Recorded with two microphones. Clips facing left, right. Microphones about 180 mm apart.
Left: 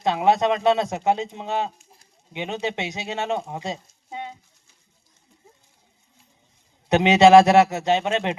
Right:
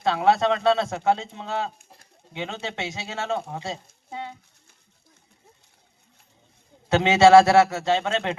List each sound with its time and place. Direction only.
0.0 s a man's voice: 20° left (ahead or behind)
1.8 s bird: 55° right (ahead or behind)
2.3 s a man's voice: 20° left (ahead or behind)
4.1 s a sound: 20° left (ahead or behind)
6.8 s a man's voice: 20° left (ahead or behind)